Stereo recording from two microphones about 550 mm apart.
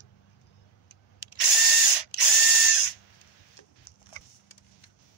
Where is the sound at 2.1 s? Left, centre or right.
Left.